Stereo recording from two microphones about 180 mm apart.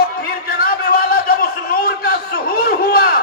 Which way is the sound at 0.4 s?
55° left (ahead or behind).